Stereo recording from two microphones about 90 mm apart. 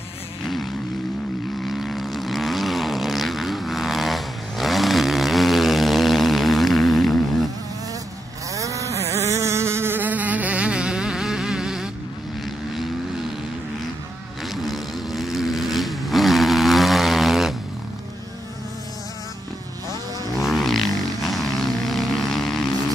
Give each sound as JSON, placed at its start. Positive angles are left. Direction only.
{"t": 1.7, "sound": "vehicle", "side_deg": 0}
{"t": 8.5, "sound": "insect", "side_deg": -35}
{"t": 14.4, "sound": "vehicle", "side_deg": 0}
{"t": 20.3, "sound": "vehicle", "side_deg": 0}